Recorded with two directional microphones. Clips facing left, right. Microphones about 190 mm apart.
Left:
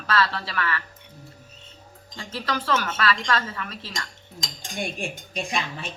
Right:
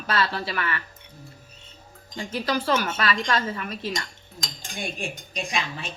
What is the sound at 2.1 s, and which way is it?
Speech, 15° right (ahead or behind).